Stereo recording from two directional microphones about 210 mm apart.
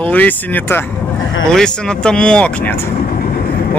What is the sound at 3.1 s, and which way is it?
Vehicle, 40° left (ahead or behind).